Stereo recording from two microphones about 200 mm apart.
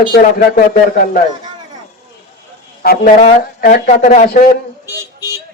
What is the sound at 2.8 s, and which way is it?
Speech, 50° left (ahead or behind).